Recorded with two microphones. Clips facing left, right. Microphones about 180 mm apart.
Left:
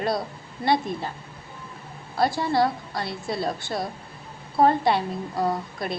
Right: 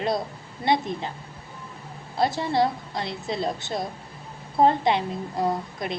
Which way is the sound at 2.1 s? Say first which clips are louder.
Left 1 dB; 20° right (ahead or behind).